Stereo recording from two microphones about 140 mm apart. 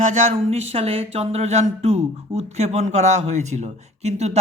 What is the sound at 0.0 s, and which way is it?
A man's voice, 60° right (ahead or behind).